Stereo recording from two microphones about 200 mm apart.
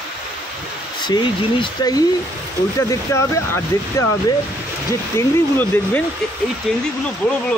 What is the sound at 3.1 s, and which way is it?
Speech, 15° left (ahead or behind).